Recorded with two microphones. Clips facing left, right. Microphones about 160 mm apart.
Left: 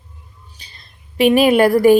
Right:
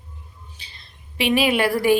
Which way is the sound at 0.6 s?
45° left (ahead or behind).